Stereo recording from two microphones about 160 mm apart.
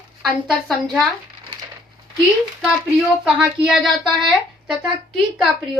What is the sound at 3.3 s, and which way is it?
Speech, 5° right (ahead or behind).